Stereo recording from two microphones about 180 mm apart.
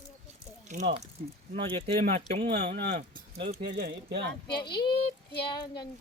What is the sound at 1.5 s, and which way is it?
Speech, 35° right (ahead or behind).